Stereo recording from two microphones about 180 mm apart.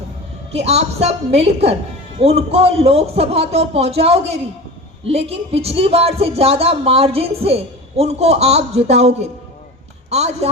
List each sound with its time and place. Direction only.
0.5 s speech: 35° right (ahead or behind)